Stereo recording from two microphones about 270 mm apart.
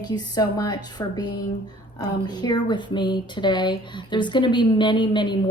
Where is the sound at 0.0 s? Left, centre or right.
Centre.